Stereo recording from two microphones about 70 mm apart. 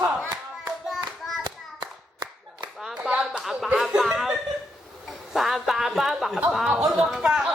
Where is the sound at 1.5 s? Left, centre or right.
Right.